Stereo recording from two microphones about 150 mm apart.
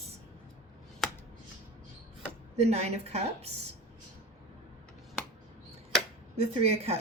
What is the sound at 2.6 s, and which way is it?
A woman's voice, 45° right (ahead or behind).